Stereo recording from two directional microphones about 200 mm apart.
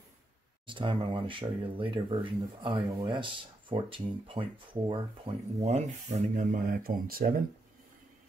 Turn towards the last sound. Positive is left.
turn(degrees=-45)  # may be behind; listen again after turning